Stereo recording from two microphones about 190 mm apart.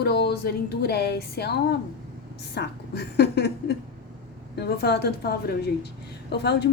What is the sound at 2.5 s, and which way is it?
A woman's voice, 60° left (ahead or behind).